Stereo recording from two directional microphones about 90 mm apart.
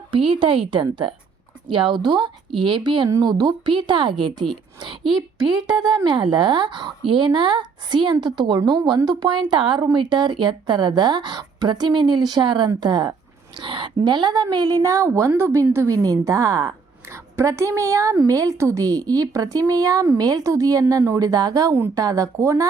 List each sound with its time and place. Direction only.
0.1 s a woman's voice: 80° right; by 3.1 s 60° right (ahead or behind)
3.2 s a woman's voice: 50° right (ahead or behind)
5.0 s a woman's voice: 5° right (ahead or behind)
5.6 s a woman's voice: 55° right (ahead or behind)
13.6 s a woman's voice: 65° right (ahead or behind); by 22.6 s 35° right (ahead or behind)